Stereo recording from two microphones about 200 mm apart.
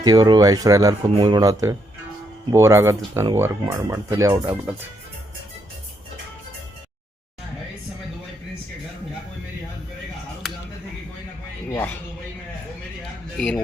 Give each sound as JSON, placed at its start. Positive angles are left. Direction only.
{"t": 0.0, "sound": "speech", "side_deg": -20}
{"t": 10.4, "sound": "a sound", "side_deg": 0}
{"t": 11.7, "sound": "speech", "side_deg": 10}
{"t": 13.3, "sound": "a man's voice", "side_deg": 5}